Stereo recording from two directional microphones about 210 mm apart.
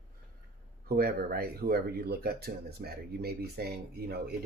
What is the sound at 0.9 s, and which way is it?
Speech, 45° right (ahead or behind).